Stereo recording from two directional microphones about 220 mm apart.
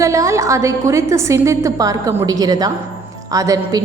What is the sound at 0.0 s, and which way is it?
Speech, 15° right (ahead or behind).